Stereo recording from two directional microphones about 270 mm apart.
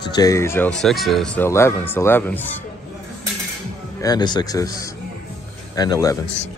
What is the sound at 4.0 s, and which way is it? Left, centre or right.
Speech, centre.